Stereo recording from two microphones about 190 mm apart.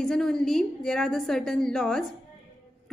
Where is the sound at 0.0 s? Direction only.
Centre (ahead or behind).